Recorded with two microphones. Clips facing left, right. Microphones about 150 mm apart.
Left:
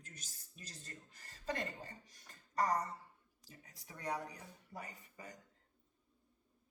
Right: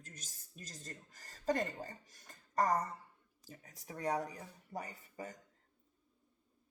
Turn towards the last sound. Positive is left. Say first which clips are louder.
# right 6 dB
turn(degrees=-40)  # may be behind; listen again after turning